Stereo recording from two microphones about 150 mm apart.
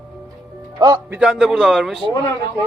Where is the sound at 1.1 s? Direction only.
5° right (ahead or behind).